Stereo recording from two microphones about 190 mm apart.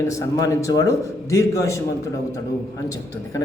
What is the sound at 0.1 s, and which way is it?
A man's voice, 15° left (ahead or behind).